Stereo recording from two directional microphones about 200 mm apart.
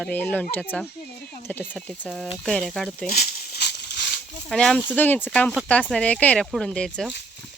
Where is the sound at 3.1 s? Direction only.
45° left (ahead or behind).